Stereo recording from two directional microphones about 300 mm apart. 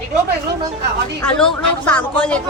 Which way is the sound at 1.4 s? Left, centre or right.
Centre.